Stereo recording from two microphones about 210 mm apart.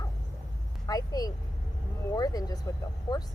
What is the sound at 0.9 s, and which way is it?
Speech, 15° left (ahead or behind).